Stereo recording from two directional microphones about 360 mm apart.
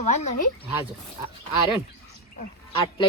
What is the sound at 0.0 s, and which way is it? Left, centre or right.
Speech, centre.